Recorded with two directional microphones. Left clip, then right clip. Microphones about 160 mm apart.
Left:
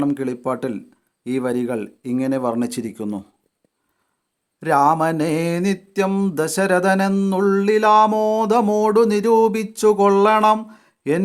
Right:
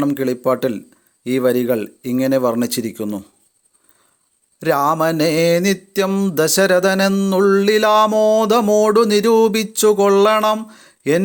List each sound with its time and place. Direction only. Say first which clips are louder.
0.0 s mantra: right 4 dB; 15° right (ahead or behind)
4.6 s mantra: even; 20° right (ahead or behind)
7.3 s music: right 4 dB; 20° right (ahead or behind)